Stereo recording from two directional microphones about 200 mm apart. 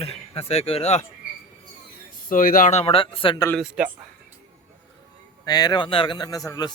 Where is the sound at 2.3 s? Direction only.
45° left (ahead or behind); by 3.5 s 20° left (ahead or behind).